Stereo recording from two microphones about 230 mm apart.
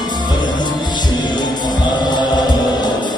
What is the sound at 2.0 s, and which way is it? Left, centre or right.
Music, centre.